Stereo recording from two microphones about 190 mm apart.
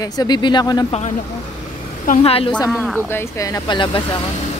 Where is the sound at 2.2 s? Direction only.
30° left (ahead or behind).